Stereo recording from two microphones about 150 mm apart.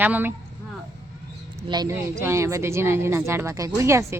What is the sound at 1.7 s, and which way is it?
Speech, 25° right (ahead or behind).